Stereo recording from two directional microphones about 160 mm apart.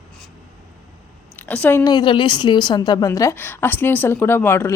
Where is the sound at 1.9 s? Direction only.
30° left (ahead or behind).